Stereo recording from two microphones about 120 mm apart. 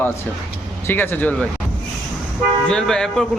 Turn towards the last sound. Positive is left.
turn(degrees=5)  # may be behind; listen again after turning